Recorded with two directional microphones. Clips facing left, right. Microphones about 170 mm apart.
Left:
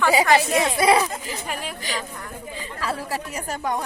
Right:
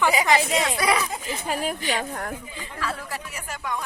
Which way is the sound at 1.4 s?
40° right (ahead or behind).